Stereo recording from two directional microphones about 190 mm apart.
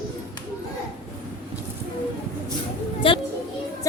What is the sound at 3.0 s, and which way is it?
Music, 30° left (ahead or behind).